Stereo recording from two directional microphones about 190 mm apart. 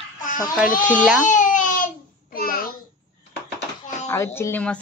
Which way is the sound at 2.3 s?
50° left (ahead or behind).